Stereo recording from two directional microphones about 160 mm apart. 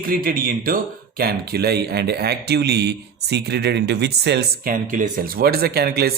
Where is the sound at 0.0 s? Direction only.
65° right (ahead or behind).